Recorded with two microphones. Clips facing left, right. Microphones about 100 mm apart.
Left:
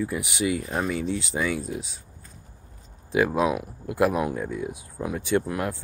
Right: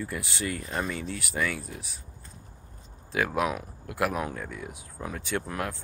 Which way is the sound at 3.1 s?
15° left (ahead or behind).